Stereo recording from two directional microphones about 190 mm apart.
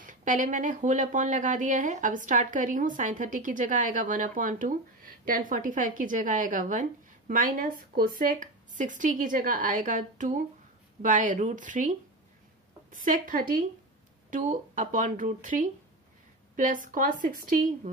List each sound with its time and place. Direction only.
0.0 s speech: 45° right (ahead or behind)
12.9 s speech: 45° right (ahead or behind)